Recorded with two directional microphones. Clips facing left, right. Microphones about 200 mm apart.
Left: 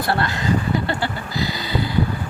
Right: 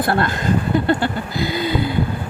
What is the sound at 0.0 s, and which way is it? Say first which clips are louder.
Speech: right 3 dB; 50° right (ahead or behind).